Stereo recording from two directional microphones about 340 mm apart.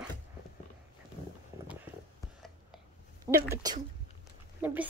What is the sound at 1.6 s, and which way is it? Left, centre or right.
Clip-clop, centre.